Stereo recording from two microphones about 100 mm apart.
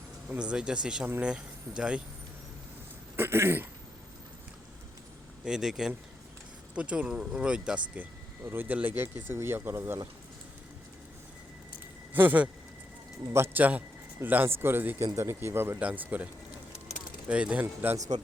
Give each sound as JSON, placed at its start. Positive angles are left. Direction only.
{"t": 0.3, "sound": "speech", "side_deg": -10}
{"t": 3.2, "sound": "speech", "side_deg": -25}
{"t": 5.5, "sound": "speech", "side_deg": -5}
{"t": 12.1, "sound": "speech", "side_deg": -20}